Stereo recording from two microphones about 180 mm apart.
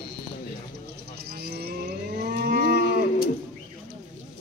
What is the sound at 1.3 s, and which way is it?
Moo, 60° right (ahead or behind).